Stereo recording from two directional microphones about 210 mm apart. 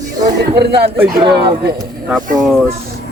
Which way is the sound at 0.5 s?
50° right (ahead or behind).